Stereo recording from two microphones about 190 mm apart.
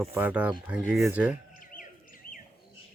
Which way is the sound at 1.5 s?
45° left (ahead or behind).